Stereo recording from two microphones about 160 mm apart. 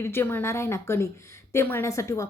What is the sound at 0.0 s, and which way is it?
A woman's voice, 15° left (ahead or behind).